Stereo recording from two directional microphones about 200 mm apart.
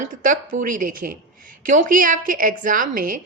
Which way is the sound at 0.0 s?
40° right (ahead or behind).